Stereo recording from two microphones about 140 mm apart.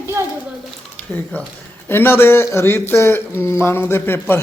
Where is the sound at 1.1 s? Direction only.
10° left (ahead or behind).